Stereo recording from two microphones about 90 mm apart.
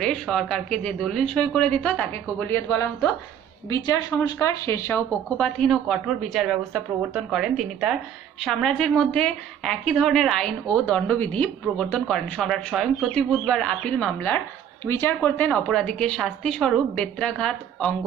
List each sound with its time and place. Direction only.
0.0 s a woman's voice: 5° left (ahead or behind); by 2.9 s 25° left (ahead or behind)
3.6 s a woman's voice: 45° left (ahead or behind)
4.4 s speech: 35° left (ahead or behind)
5.4 s a woman's voice: centre (ahead or behind)
10.9 s a woman's voice: 15° left (ahead or behind)
11.7 s a woman's voice: 5° left (ahead or behind)
14.9 s a woman's voice: 25° left (ahead or behind); by 17.9 s 10° left (ahead or behind)